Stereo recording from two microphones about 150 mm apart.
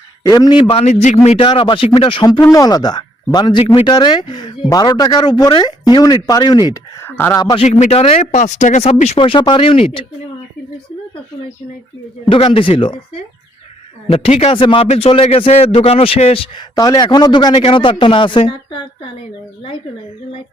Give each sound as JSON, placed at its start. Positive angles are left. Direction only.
{"t": 0.2, "sound": "a man's voice", "side_deg": 25}
{"t": 1.5, "sound": "a man's voice", "side_deg": 35}
{"t": 2.4, "sound": "a man's voice", "side_deg": 25}
{"t": 6.7, "sound": "speech", "side_deg": 15}
{"t": 7.3, "sound": "speech", "side_deg": 25}
{"t": 7.6, "sound": "speech", "side_deg": 50}
{"t": 12.3, "sound": "a man's voice", "side_deg": 35}
{"t": 14.1, "sound": "a man's voice", "side_deg": 40}
{"t": 16.7, "sound": "a man's voice", "side_deg": 25}